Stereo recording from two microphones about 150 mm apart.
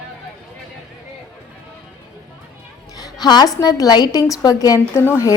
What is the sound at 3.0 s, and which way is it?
A woman's voice, 25° left (ahead or behind).